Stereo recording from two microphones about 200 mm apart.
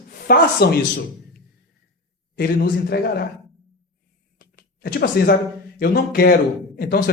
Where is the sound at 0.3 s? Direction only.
50° left (ahead or behind).